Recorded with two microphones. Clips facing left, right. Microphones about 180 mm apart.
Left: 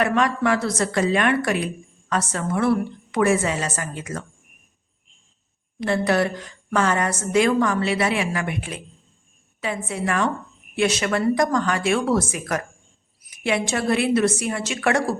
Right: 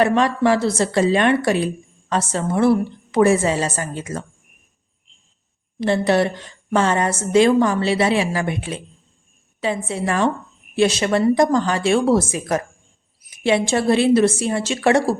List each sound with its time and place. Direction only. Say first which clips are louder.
0.0 s a woman's voice: right 4 dB; 30° right (ahead or behind)
5.8 s a woman's voice: right 3 dB; 25° right (ahead or behind)